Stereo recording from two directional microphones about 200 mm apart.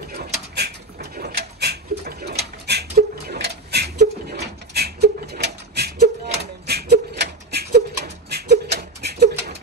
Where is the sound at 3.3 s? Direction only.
55° right (ahead or behind).